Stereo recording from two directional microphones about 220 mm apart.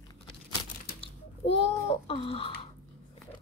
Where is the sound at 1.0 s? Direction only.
25° left (ahead or behind).